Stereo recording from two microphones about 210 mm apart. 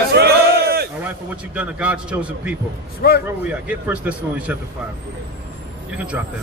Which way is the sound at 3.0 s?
50° left (ahead or behind).